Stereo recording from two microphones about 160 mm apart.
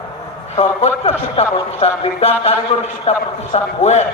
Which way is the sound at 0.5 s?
40° left (ahead or behind).